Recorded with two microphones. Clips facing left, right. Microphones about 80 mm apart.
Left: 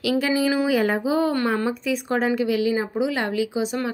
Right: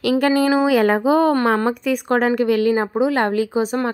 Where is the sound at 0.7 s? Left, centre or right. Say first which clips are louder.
Right 5 dB; right.